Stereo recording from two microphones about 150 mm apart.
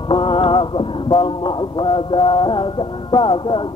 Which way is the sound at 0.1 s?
35° left (ahead or behind).